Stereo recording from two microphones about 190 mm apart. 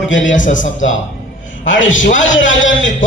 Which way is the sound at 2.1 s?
85° left.